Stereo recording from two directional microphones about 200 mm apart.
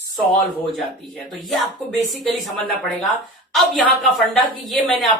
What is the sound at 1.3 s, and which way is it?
Speech, centre (ahead or behind).